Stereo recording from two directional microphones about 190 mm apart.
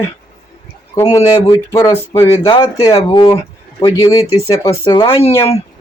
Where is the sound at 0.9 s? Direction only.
15° left (ahead or behind).